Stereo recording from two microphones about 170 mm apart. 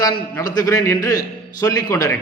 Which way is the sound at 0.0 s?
20° left (ahead or behind).